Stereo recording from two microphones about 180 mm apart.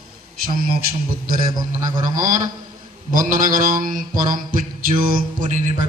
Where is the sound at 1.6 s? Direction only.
20° right (ahead or behind).